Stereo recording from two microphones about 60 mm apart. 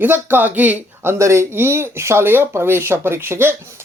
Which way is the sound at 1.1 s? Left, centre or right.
Right.